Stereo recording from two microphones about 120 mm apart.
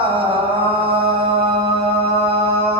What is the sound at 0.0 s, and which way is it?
Mantra, 50° right (ahead or behind).